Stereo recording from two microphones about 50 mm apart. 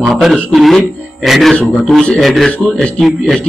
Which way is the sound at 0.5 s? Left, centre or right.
Centre.